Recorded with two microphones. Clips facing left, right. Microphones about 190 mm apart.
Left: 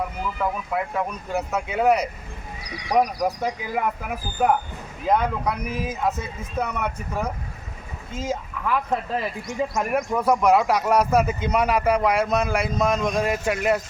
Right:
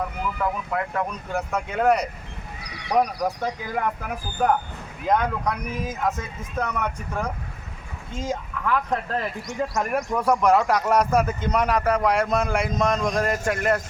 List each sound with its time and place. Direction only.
0.3 s speech: 10° left (ahead or behind)